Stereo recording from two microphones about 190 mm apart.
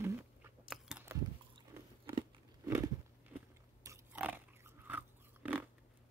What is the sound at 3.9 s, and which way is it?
Pig, 10° right (ahead or behind).